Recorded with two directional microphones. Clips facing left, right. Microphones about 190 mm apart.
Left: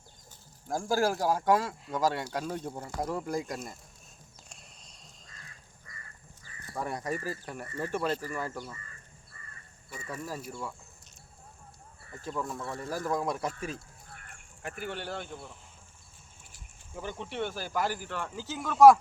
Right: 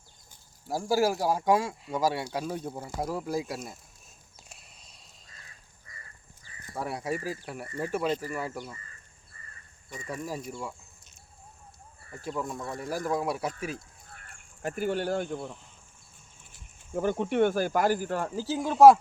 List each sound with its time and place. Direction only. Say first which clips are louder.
0.7 s speech: right 2 dB; 5° right (ahead or behind)
4.4 s a sound: even; 5° right (ahead or behind)
6.7 s speech: right 2 dB; 10° right (ahead or behind)
10.5 s speech: right 2 dB; 15° right (ahead or behind)
12.3 s speech: right 2 dB; centre (ahead or behind)
12.5 s speech: right 2 dB; 15° right (ahead or behind)
14.2 s speech: right 9 dB; 40° right (ahead or behind)